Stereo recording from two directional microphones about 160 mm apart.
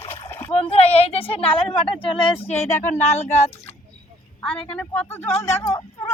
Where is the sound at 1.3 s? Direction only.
35° left (ahead or behind).